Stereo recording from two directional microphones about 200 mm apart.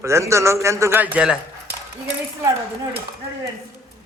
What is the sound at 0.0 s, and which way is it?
A man's voice, 15° right (ahead or behind).